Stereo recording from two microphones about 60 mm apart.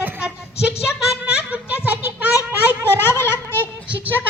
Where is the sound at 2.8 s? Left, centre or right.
Left.